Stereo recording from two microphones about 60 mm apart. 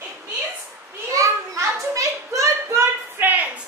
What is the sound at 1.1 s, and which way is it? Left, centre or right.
Children playing, right.